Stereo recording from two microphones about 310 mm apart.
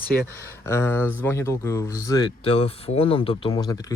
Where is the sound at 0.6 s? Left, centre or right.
Centre.